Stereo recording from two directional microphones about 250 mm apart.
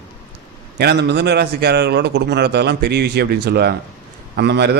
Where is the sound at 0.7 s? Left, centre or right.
Right.